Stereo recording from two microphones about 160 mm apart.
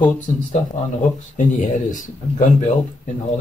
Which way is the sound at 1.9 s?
55° left (ahead or behind).